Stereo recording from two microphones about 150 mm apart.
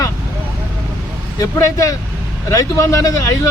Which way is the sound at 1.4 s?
20° left (ahead or behind).